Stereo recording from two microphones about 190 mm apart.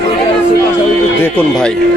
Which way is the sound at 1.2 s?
5° left (ahead or behind).